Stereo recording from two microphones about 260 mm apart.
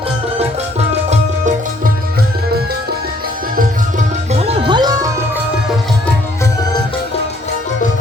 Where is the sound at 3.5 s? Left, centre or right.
Right.